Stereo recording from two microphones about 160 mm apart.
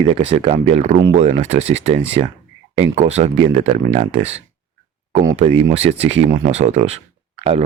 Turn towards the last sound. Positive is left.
turn(degrees=-40)  # may be behind; listen again after turning